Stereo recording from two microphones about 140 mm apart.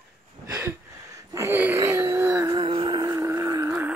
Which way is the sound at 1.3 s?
15° right (ahead or behind).